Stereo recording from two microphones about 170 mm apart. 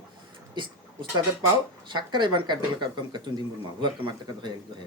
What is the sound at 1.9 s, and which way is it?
A man's voice, 25° right (ahead or behind).